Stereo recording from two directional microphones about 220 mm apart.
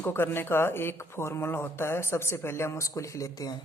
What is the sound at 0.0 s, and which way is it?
Speech, 10° left (ahead or behind).